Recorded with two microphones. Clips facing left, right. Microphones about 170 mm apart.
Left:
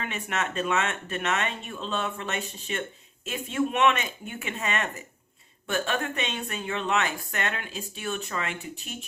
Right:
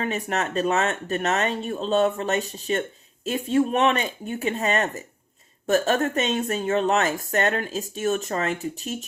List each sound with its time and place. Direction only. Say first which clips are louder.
0.0 s speech: right 5 dB; 40° right (ahead or behind)